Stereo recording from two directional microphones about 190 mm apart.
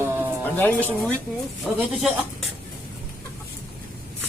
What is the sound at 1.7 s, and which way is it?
Speech, centre (ahead or behind).